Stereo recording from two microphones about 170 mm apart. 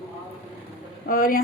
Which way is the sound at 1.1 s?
55° left (ahead or behind).